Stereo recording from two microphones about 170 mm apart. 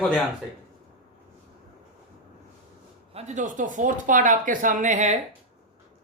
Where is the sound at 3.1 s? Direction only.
45° right (ahead or behind).